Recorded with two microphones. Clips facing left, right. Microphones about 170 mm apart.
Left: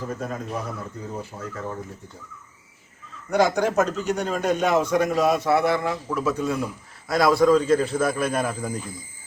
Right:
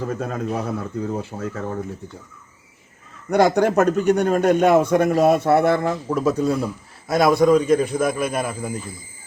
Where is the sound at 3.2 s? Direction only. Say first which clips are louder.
Right 4 dB; 60° right (ahead or behind); by 6.7 s 35° right (ahead or behind).